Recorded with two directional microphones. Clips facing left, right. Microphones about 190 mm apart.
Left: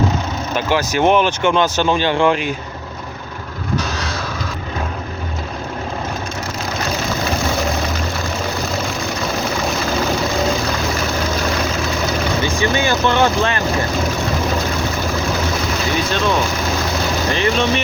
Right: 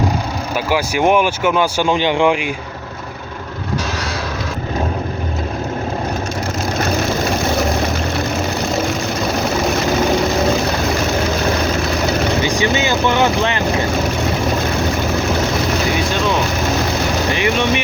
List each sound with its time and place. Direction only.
0.5 s speech: 10° right (ahead or behind)
12.4 s vehicle: 15° right (ahead or behind)
17.3 s vehicle: 15° right (ahead or behind)